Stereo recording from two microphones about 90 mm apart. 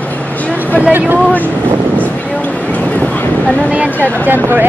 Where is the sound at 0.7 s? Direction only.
15° right (ahead or behind).